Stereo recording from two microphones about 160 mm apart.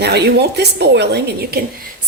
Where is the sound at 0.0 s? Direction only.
90° right.